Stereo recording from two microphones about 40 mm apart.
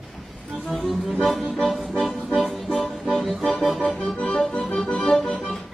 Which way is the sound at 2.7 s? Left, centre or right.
Left.